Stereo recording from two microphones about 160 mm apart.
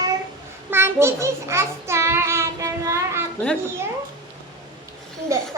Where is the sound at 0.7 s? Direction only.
15° right (ahead or behind).